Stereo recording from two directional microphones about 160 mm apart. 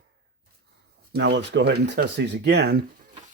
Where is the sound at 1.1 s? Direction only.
90° right.